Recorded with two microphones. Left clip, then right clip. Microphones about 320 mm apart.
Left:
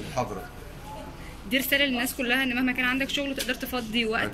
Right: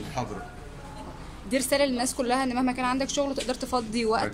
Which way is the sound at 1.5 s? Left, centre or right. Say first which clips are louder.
Even; centre.